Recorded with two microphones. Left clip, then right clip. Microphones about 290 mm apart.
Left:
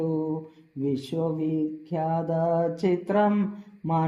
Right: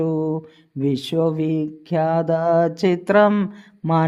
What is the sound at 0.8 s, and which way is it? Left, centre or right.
Mantra, right.